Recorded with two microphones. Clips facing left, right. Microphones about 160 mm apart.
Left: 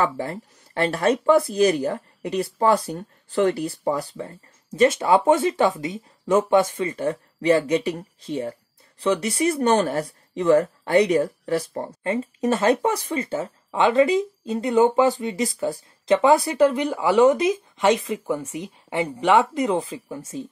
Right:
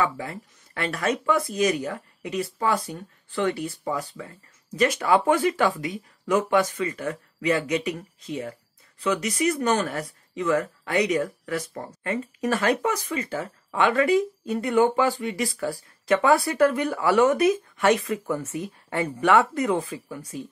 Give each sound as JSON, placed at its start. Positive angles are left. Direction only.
{"t": 0.0, "sound": "speech", "side_deg": 35}
{"t": 4.7, "sound": "speech", "side_deg": 25}